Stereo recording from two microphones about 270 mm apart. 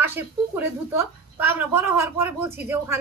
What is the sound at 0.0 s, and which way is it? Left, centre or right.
A woman's voice, centre.